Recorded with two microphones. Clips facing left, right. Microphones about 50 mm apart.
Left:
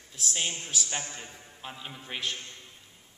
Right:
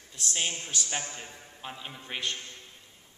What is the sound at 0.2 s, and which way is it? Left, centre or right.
A man's voice, centre.